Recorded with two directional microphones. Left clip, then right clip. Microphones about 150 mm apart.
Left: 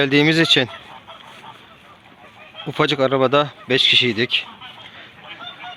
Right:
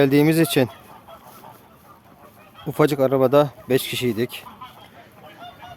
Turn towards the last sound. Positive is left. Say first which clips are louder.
# left 9 dB
turn(degrees=-25)  # may be behind; listen again after turning